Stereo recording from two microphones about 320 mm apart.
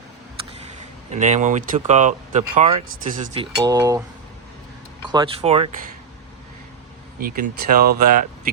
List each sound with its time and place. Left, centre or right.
1.1 s speech: right
5.0 s speech: centre
7.2 s speech: right